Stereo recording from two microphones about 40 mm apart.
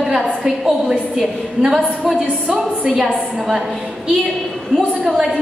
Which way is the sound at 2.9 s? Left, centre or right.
Centre.